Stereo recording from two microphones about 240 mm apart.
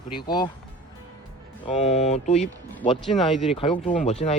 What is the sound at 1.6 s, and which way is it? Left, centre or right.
Speech, left.